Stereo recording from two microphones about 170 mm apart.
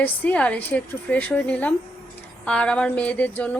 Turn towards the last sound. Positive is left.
turn(degrees=10)  # may be behind; listen again after turning